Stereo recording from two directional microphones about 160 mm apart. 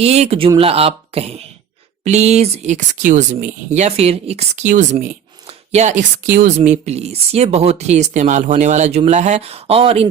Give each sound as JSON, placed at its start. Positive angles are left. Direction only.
{"t": 0.0, "sound": "speech", "side_deg": -40}
{"t": 6.7, "sound": "speech", "side_deg": -40}